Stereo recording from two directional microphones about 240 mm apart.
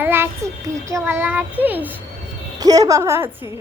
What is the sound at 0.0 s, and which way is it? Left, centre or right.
Child singing, centre.